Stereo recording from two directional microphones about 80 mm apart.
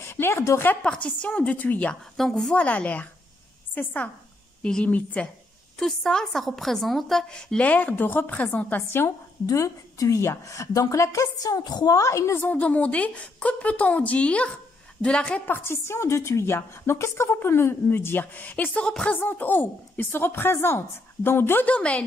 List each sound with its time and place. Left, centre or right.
0.0 s a woman's voice: left
0.8 s a woman's voice: centre
2.1 s a woman's voice: centre
2.5 s a woman's voice: centre
5.8 s a woman's voice: centre; by 9.0 s left
9.5 s a woman's voice: left
12.4 s a woman's voice: centre
15.5 s a woman's voice: left; by 19.1 s centre
19.1 s a woman's voice: left